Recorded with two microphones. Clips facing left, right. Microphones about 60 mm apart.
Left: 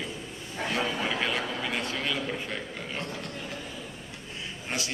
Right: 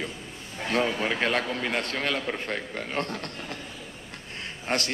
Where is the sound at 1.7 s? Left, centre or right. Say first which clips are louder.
Right 3 dB; right.